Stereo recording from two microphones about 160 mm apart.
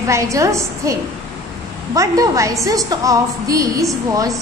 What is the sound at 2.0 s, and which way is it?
A woman's voice, 20° right (ahead or behind).